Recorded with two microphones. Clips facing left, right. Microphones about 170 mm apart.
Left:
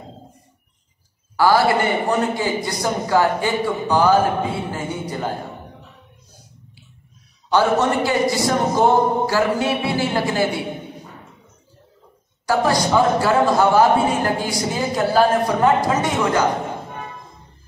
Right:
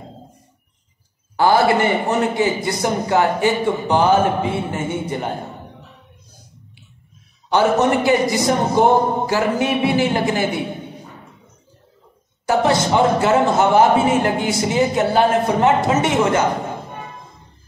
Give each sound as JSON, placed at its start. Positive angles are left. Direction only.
{"t": 1.3, "sound": "a man's voice", "side_deg": -20}
{"t": 7.5, "sound": "a man's voice", "side_deg": -20}
{"t": 12.4, "sound": "a man's voice", "side_deg": -20}